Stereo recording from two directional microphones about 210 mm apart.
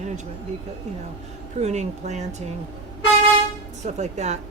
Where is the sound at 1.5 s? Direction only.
35° right (ahead or behind).